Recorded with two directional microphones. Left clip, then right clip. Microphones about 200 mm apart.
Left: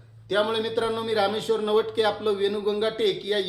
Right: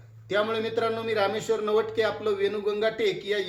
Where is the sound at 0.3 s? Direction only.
15° left (ahead or behind).